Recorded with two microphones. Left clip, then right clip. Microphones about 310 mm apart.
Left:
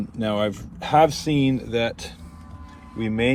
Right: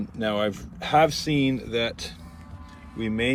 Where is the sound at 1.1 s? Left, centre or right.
Centre.